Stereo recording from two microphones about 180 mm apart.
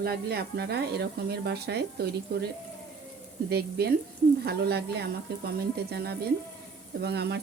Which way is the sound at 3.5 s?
60° right (ahead or behind).